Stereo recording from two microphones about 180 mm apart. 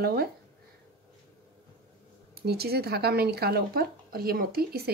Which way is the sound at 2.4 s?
60° right (ahead or behind).